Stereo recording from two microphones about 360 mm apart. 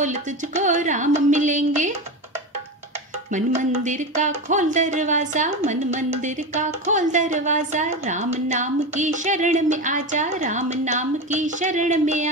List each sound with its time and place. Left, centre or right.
0.0 s speech: centre
3.3 s speech: right